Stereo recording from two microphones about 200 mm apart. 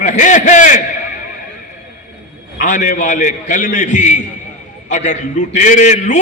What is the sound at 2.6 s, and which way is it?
A man's voice, 35° left (ahead or behind).